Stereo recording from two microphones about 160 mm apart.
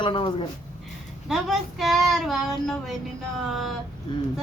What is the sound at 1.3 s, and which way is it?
A child's voice, centre (ahead or behind).